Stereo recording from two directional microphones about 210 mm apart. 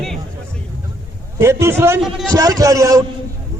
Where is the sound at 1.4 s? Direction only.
10° right (ahead or behind).